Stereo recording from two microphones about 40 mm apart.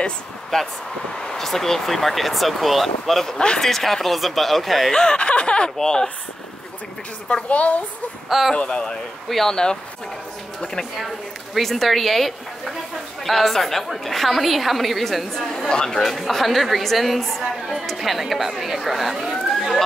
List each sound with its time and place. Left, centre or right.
0.5 s a woman's voice: centre
3.3 s speech: left
3.6 s speech: centre
4.9 s speech: left
5.8 s a woman's voice: centre
7.4 s a woman's voice: left
8.3 s speech: centre
8.5 s speech: left
9.3 s a woman's voice: centre
11.5 s a woman's voice: centre
15.7 s speech: centre
16.0 s speech: centre